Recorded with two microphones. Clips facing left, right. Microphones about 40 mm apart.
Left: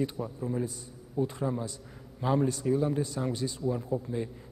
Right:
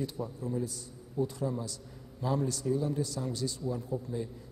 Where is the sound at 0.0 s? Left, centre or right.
Left.